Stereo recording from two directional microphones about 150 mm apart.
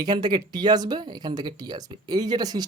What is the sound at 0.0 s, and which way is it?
Speech, 30° right (ahead or behind).